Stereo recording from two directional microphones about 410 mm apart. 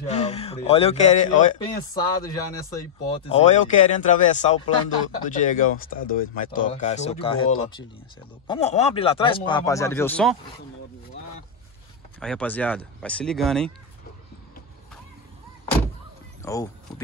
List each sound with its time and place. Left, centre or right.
0.0 s speech: centre
3.2 s speech: centre
8.5 s speech: centre
12.2 s speech: centre
16.4 s speech: centre